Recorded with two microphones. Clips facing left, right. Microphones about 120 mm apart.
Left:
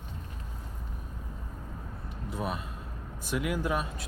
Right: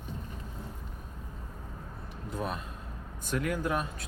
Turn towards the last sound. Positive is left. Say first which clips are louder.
# left 1 dB
turn(degrees=5)  # may be behind; listen again after turning